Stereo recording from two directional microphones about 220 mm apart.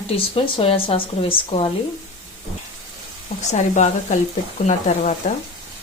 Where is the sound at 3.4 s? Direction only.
35° left (ahead or behind).